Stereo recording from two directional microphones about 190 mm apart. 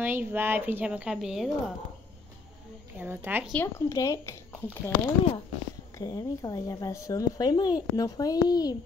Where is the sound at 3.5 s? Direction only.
15° left (ahead or behind).